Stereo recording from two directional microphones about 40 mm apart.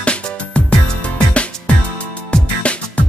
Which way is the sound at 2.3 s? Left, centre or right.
Left.